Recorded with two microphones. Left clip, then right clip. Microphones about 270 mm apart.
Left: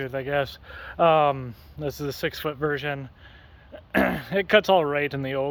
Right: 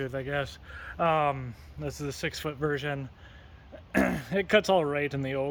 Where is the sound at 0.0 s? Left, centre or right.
Centre.